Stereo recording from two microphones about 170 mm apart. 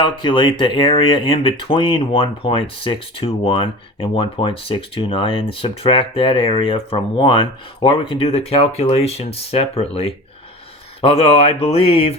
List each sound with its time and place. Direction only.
0.0 s speech: 30° left (ahead or behind)